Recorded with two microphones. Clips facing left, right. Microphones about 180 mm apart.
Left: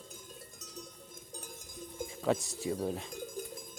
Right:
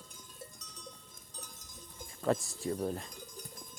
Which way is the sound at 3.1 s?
50° left (ahead or behind).